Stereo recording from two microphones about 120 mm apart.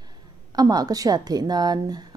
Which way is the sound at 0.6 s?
35° right (ahead or behind).